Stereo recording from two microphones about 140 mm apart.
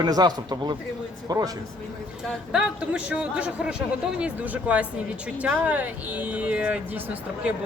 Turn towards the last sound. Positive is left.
turn(degrees=-10)  # may be behind; listen again after turning